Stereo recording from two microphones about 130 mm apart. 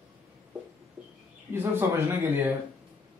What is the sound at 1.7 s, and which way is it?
Speech, 15° right (ahead or behind).